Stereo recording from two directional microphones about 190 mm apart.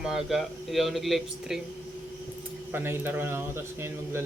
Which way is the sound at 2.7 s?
10° right (ahead or behind).